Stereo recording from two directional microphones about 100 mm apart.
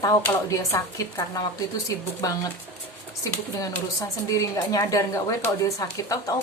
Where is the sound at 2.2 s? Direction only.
35° left (ahead or behind).